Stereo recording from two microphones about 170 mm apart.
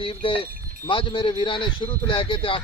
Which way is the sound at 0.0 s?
30° left (ahead or behind).